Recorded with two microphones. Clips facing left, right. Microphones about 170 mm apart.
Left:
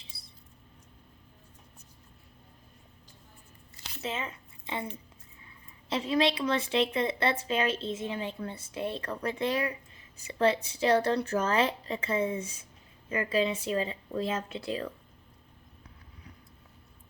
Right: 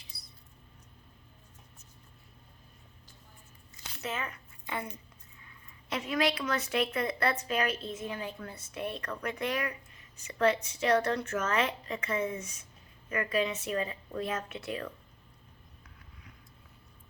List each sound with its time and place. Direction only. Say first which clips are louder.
0.0 s mouse: left 2 dB; 25° left (ahead or behind)
4.0 s a woman's voice: left 1 dB; 25° left (ahead or behind)
5.9 s a woman's voice: left 3 dB; 30° left (ahead or behind)